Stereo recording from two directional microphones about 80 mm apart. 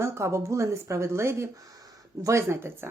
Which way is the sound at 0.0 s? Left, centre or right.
Right.